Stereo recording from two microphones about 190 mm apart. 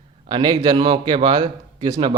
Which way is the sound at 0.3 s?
20° right (ahead or behind).